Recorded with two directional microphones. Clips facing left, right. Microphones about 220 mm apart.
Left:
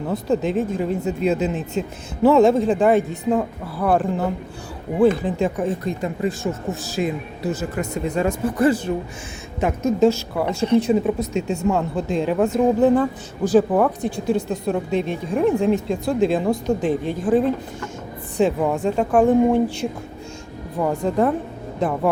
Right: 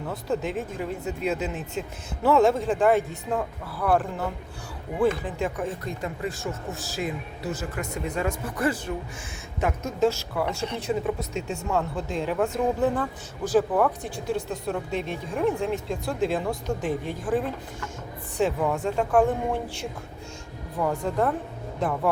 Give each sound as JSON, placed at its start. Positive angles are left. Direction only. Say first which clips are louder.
{"t": 0.1, "sound": "speech", "louder": "left 7 dB", "side_deg": 20}